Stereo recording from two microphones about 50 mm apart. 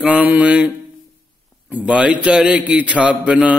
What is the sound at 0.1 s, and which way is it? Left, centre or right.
Speech, right.